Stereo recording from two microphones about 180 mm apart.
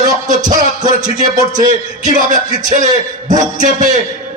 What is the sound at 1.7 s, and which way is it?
A man's voice, 45° right (ahead or behind).